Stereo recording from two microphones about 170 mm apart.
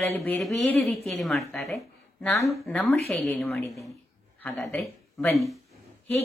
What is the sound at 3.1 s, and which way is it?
Speech, centre (ahead or behind).